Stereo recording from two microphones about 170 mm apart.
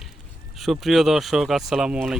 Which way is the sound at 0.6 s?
Centre (ahead or behind).